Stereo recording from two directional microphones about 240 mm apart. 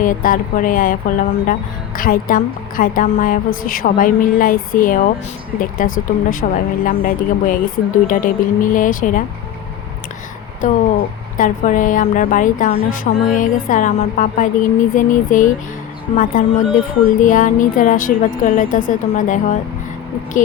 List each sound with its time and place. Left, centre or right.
0.0 s a woman's voice: left
10.6 s a woman's voice: left